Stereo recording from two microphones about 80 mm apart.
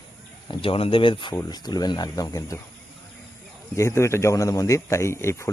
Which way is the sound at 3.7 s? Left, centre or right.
Left.